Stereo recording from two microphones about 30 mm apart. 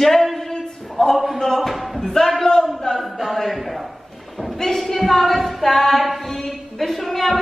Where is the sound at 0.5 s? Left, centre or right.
Centre.